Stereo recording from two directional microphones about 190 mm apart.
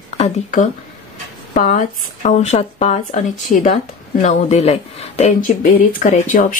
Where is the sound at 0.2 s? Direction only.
40° left (ahead or behind).